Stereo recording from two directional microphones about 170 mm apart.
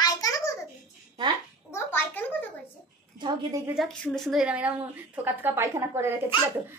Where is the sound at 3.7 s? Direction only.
Centre (ahead or behind).